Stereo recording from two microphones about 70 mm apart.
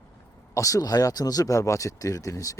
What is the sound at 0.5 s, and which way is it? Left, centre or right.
Speech, left.